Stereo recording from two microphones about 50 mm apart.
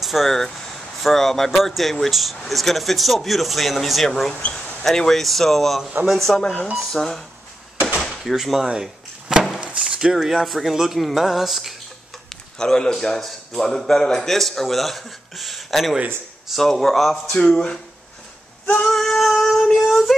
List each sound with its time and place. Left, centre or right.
0.0 s a man's voice: centre
6.3 s speech: centre
6.7 s a man's voice: centre
8.2 s speech: centre
8.8 s a sound: centre
10.1 s a man's voice: centre
12.3 s a man's voice: centre
17.3 s speech: centre
18.9 s a man's voice: centre